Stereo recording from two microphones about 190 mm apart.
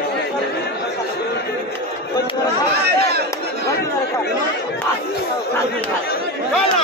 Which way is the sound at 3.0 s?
55° right (ahead or behind).